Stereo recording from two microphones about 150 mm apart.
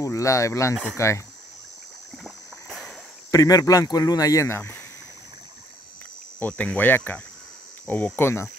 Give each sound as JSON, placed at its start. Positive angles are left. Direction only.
{"t": 0.0, "sound": "speech", "side_deg": 20}
{"t": 2.2, "sound": "rowboat", "side_deg": 0}
{"t": 3.3, "sound": "speech", "side_deg": 25}
{"t": 6.4, "sound": "speech", "side_deg": 10}